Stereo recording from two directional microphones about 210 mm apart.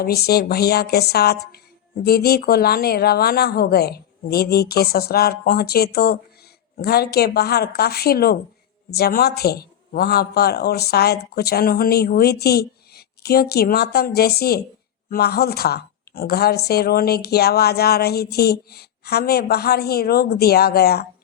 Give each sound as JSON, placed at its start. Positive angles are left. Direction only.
{"t": 0.0, "sound": "a woman's voice", "side_deg": 50}